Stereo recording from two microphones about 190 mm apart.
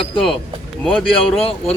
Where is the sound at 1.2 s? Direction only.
30° left (ahead or behind).